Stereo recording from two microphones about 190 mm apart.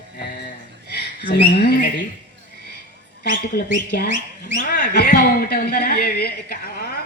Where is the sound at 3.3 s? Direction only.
50° left (ahead or behind).